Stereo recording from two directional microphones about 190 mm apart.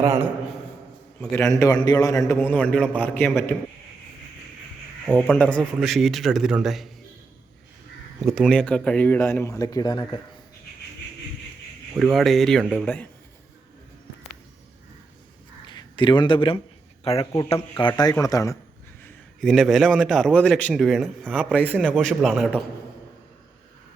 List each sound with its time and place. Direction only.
0.0 s a man's voice: 15° right (ahead or behind)
1.2 s a man's voice: 5° left (ahead or behind)
1.5 s a man's voice: 15° left (ahead or behind)
5.0 s a man's voice: 5° left (ahead or behind)
8.2 s a man's voice: centre (ahead or behind); by 10.2 s 20° left (ahead or behind)
11.9 s a man's voice: centre (ahead or behind)
15.6 s a sound: 25° left (ahead or behind)
17.0 s a man's voice: 30° left (ahead or behind)
19.0 s a man's voice: centre (ahead or behind)